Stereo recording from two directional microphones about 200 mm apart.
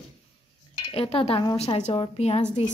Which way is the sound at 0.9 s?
30° left (ahead or behind).